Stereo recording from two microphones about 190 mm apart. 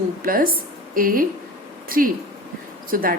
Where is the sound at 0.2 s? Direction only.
50° right (ahead or behind).